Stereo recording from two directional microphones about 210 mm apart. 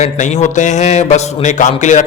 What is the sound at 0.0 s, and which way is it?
A man's voice, 35° left (ahead or behind).